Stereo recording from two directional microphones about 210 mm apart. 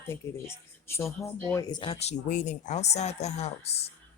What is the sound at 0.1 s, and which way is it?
Speech, 10° left (ahead or behind).